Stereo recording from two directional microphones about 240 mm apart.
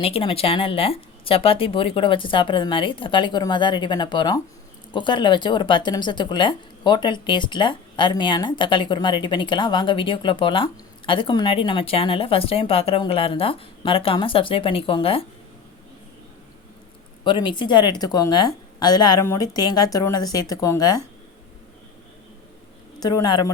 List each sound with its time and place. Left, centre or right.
0.0 s speech: left
17.2 s a woman's voice: centre
23.0 s a woman's voice: centre